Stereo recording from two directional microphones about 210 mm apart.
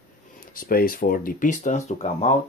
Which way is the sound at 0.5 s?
45° left (ahead or behind).